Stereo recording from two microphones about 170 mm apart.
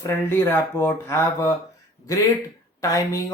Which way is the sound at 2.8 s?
20° left (ahead or behind).